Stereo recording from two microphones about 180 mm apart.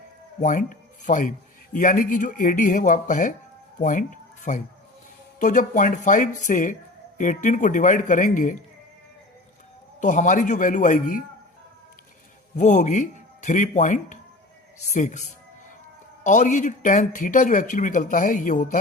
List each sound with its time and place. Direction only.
0.4 s speech: 45° left (ahead or behind)
10.0 s speech: 45° left (ahead or behind)
12.5 s speech: 40° left (ahead or behind)